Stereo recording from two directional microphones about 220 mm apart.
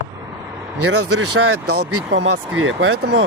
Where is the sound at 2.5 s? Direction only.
65° right (ahead or behind).